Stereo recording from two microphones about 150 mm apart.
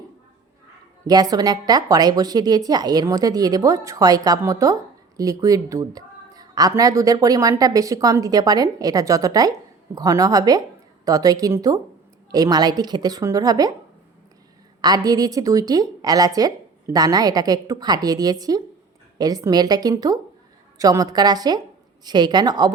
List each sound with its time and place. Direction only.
1.0 s a woman's voice: 25° right (ahead or behind)
14.8 s a woman's voice: 25° right (ahead or behind)